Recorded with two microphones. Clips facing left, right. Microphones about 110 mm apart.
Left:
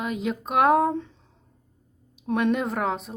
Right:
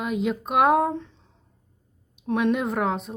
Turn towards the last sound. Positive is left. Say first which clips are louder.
# right 1 dB
turn(degrees=0)  # may be behind; listen again after turning